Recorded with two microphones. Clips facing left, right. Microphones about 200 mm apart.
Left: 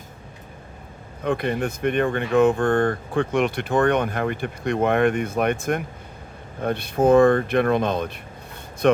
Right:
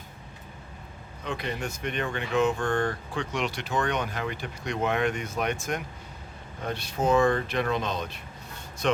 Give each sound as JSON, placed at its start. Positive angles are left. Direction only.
{"t": 1.2, "sound": "speech", "side_deg": 55}